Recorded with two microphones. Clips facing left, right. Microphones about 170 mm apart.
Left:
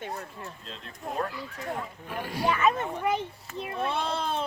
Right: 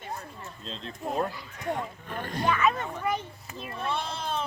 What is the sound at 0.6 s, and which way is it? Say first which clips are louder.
Speech: right 6 dB; 25° right (ahead or behind).